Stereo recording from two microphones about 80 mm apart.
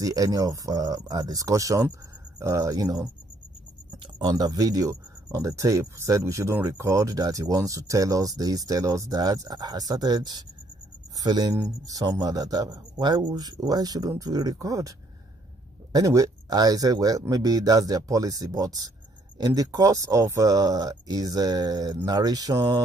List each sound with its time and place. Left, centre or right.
0.0 s speech: right